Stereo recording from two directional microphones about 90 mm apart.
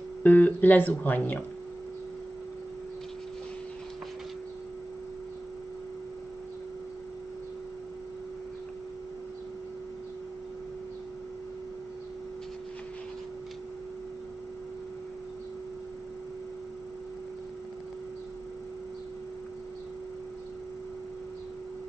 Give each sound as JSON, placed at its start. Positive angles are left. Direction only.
{"t": 0.2, "sound": "speech", "side_deg": 20}